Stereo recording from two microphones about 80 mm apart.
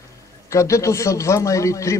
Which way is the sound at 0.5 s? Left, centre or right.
Left.